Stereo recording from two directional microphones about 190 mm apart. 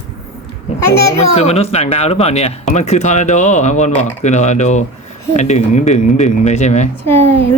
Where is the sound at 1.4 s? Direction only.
35° left (ahead or behind).